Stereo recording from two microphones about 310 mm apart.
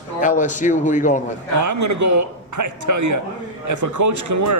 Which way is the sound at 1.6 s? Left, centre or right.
Right.